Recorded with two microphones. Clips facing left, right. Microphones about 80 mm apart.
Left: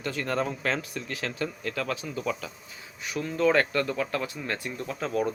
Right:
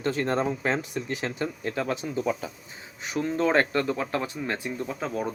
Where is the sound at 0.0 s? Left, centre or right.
Right.